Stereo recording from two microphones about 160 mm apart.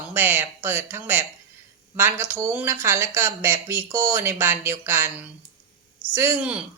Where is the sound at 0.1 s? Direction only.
10° right (ahead or behind).